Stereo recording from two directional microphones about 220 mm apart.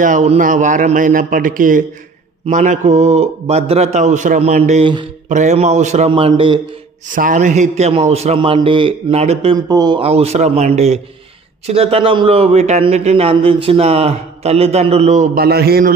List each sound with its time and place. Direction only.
0.0 s a man's voice: 35° right (ahead or behind)
7.1 s a man's voice: 35° right (ahead or behind)